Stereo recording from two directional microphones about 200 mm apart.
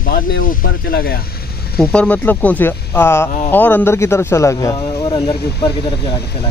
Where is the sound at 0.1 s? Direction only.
45° left (ahead or behind).